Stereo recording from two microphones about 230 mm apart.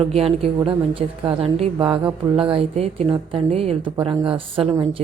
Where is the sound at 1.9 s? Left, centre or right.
Centre.